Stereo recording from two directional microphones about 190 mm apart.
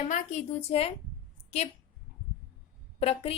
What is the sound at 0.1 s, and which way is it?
A woman's voice, 40° left (ahead or behind).